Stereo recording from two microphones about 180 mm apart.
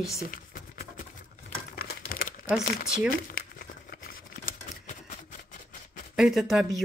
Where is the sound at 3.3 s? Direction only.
55° left (ahead or behind).